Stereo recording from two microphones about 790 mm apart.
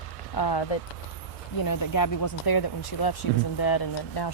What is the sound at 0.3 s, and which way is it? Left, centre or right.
Speech, left.